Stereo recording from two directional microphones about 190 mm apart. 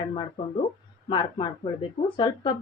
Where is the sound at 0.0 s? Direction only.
30° left (ahead or behind).